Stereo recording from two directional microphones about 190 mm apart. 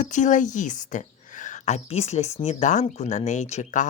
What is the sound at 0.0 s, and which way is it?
Speech, 40° left (ahead or behind).